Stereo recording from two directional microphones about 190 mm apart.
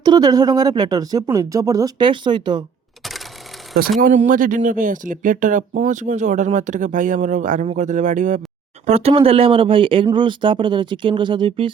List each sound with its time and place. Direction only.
0.0 s speech: 20° right (ahead or behind)
4.0 s speech: 40° right (ahead or behind)